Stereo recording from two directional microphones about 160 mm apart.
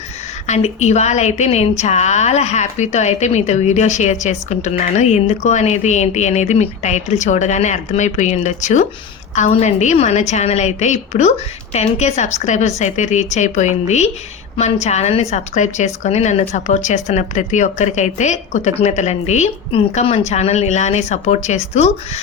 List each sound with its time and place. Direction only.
0.4 s a woman's voice: 45° left (ahead or behind)